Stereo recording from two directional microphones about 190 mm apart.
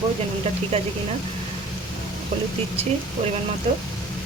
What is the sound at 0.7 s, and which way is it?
Speech, 30° right (ahead or behind).